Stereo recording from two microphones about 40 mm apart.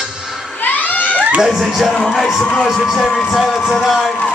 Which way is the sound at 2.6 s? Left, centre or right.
Centre.